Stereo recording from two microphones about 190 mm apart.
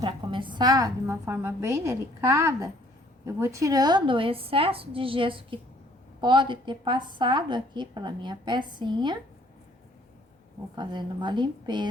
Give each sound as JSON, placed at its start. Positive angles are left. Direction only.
{"t": 0.0, "sound": "a woman's voice", "side_deg": -25}
{"t": 10.8, "sound": "a woman's voice", "side_deg": -25}